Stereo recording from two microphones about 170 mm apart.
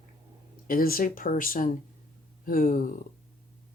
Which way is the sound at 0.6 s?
60° left (ahead or behind).